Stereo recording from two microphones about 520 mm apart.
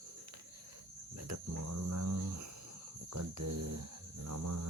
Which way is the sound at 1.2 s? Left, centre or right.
Right.